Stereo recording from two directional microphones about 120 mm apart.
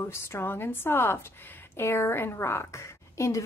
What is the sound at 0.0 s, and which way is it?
A woman's voice, 20° left (ahead or behind).